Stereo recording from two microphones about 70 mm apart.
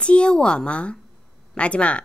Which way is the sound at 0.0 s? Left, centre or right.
Centre.